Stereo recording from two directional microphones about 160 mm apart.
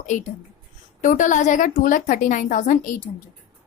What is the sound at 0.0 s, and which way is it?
A woman's voice, 50° left (ahead or behind).